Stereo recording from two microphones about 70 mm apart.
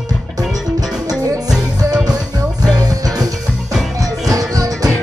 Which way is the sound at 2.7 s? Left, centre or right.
Right.